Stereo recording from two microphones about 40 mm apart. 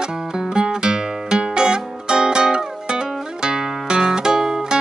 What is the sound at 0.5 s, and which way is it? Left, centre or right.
Music, centre.